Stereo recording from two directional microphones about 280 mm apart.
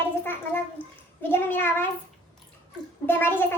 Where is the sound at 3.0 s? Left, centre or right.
Centre.